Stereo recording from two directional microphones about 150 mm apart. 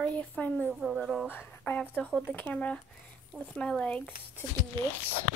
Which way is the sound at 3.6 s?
5° left (ahead or behind).